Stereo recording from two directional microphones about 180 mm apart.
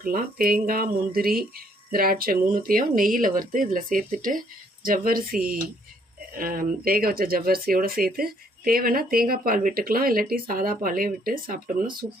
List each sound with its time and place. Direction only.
0.0 s speech: 55° right (ahead or behind)